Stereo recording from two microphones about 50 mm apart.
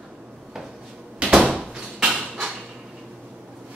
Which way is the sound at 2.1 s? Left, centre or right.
Centre.